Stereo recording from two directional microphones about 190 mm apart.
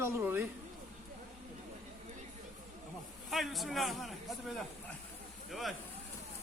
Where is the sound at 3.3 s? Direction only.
Centre (ahead or behind).